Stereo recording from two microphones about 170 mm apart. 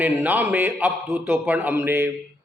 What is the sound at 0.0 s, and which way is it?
A man's voice, 10° right (ahead or behind).